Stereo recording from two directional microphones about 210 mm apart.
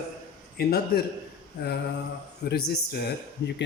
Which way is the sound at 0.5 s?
50° left (ahead or behind).